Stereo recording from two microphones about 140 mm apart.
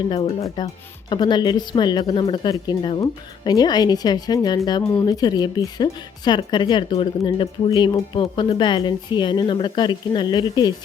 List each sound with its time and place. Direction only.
0.1 s a woman's voice: 40° left (ahead or behind)
0.4 s a woman's voice: 30° left (ahead or behind)